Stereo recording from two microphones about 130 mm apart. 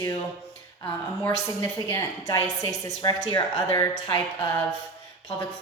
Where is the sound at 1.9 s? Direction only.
25° left (ahead or behind).